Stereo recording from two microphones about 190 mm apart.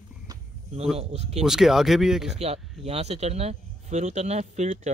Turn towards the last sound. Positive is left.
turn(degrees=-35)  # may be behind; listen again after turning